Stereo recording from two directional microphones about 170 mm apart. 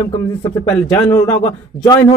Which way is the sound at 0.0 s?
20° left (ahead or behind).